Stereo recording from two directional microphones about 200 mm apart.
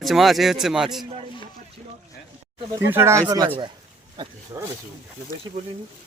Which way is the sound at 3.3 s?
25° right (ahead or behind).